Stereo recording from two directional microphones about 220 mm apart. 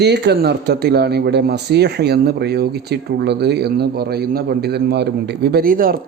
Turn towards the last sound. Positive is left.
turn(degrees=-40)  # may be behind; listen again after turning